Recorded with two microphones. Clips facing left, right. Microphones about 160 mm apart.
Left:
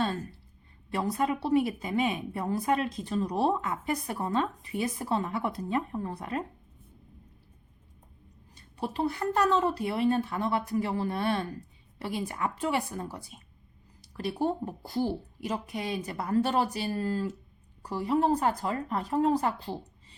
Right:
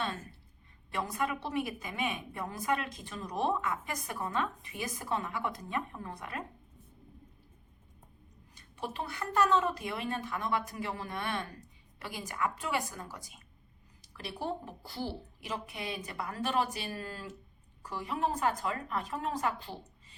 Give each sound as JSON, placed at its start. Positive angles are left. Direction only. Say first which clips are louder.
{"t": 0.9, "sound": "a woman's voice", "louder": "left 5 dB", "side_deg": 35}
{"t": 8.5, "sound": "a woman's voice", "louder": "left 6 dB", "side_deg": 35}
{"t": 14.1, "sound": "a woman's voice", "louder": "left 8 dB", "side_deg": 40}